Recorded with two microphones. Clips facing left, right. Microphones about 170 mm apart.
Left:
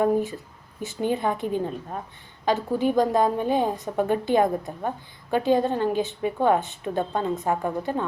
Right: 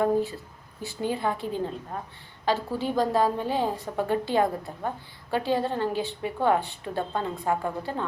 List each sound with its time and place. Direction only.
0.0 s a woman's voice: 20° left (ahead or behind)